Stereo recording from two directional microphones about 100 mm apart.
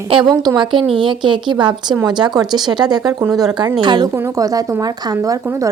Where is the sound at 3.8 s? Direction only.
50° right (ahead or behind).